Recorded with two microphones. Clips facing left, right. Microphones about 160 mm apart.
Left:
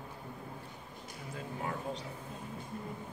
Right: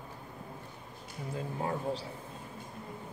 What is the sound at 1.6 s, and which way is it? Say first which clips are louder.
Speech: right 4 dB; 30° right (ahead or behind).